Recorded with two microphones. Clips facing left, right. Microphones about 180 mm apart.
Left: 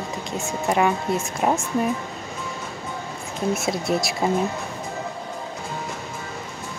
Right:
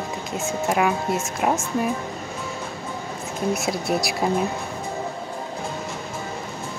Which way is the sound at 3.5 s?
Centre (ahead or behind).